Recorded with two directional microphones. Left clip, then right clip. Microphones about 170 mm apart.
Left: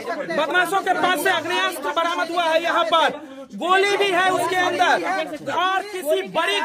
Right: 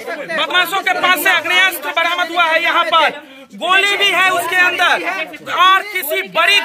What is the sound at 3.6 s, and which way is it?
A man's voice, 30° left (ahead or behind).